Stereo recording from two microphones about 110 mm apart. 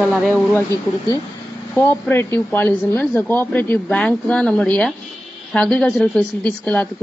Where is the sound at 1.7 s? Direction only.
20° left (ahead or behind).